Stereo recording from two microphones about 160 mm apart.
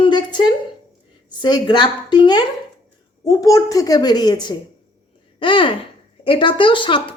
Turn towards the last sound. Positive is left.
turn(degrees=30)  # may be behind; listen again after turning